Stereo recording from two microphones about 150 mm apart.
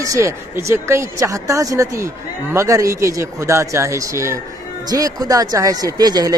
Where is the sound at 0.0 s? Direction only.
20° right (ahead or behind).